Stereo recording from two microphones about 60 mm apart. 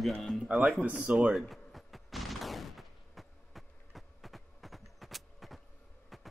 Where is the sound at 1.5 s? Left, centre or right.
Centre.